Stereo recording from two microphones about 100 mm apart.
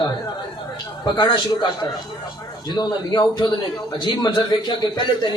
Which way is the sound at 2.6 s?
45° left (ahead or behind).